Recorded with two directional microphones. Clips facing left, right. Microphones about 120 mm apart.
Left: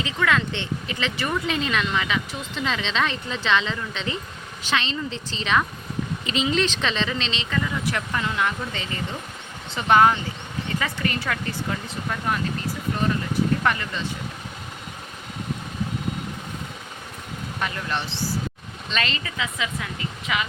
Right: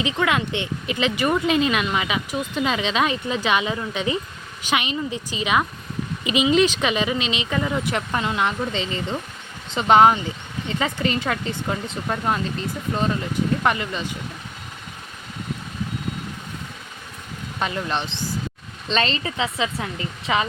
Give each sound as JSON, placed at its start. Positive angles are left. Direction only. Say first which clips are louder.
{"t": 0.0, "sound": "speech", "louder": "right 2 dB", "side_deg": -20}
{"t": 17.6, "sound": "speech", "louder": "right 4 dB", "side_deg": -25}
{"t": 18.9, "sound": "speech", "louder": "right 5 dB", "side_deg": -30}